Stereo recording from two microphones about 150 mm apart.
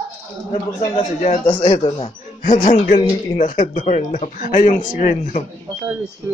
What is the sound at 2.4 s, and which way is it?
Speech, 65° left (ahead or behind).